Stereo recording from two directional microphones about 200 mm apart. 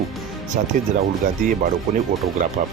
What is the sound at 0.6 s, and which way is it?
Speech, 35° right (ahead or behind).